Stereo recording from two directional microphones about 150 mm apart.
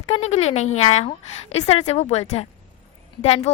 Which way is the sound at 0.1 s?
45° left (ahead or behind).